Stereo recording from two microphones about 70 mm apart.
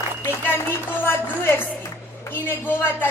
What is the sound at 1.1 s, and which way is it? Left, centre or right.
Music, left.